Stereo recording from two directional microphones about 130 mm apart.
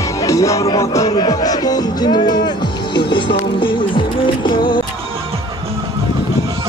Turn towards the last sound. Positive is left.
turn(degrees=35)  # may be behind; listen again after turning